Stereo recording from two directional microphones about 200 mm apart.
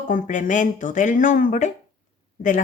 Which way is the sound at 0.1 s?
40° left (ahead or behind).